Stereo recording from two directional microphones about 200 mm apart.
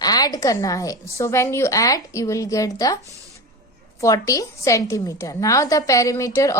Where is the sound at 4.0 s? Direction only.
15° left (ahead or behind).